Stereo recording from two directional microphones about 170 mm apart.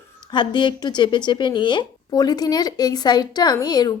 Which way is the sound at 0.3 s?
25° left (ahead or behind).